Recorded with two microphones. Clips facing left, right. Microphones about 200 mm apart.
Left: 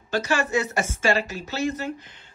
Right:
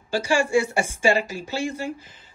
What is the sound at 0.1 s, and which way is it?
Speech, 10° right (ahead or behind).